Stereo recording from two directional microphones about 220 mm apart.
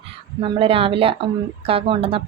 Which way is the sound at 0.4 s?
25° right (ahead or behind).